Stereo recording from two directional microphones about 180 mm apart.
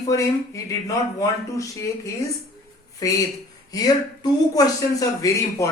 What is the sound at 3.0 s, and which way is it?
Speech, 20° left (ahead or behind).